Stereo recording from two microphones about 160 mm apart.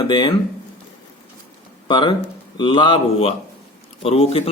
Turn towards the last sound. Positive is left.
turn(degrees=35)  # may be behind; listen again after turning